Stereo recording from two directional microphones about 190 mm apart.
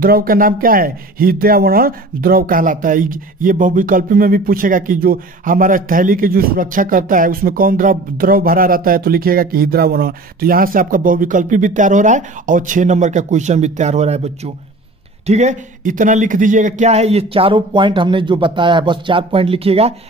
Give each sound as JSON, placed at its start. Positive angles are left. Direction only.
{"t": 0.0, "sound": "speech", "side_deg": -50}